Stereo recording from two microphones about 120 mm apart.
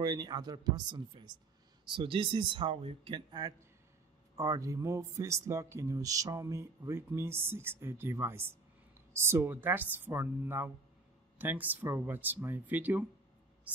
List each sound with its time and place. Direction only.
0.0 s speech: 35° right (ahead or behind); by 13.0 s 15° right (ahead or behind)